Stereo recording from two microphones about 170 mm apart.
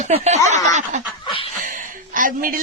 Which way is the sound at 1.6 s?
55° right (ahead or behind).